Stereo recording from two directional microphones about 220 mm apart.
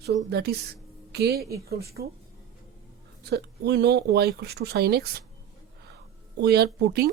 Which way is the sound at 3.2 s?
50° right (ahead or behind).